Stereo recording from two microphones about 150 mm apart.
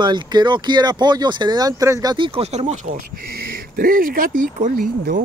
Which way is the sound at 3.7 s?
70° right (ahead or behind).